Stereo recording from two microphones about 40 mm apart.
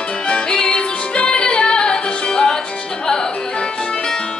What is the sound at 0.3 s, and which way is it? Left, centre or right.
Music, left.